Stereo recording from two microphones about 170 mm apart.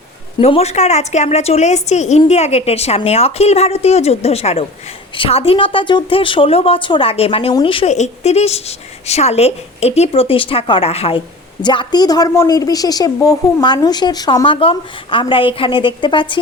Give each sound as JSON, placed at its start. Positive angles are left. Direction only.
{"t": 0.3, "sound": "a woman's voice", "side_deg": 35}